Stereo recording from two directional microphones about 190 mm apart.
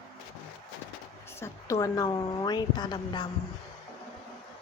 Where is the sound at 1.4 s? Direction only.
15° left (ahead or behind).